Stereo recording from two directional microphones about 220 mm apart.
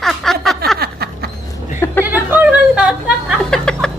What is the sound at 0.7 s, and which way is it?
Snicker, 45° right (ahead or behind).